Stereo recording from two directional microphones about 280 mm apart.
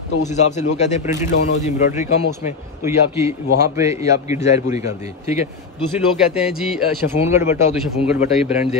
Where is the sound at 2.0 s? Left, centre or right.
Centre.